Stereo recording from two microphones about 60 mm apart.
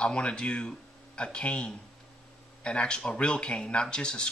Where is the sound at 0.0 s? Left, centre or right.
Centre.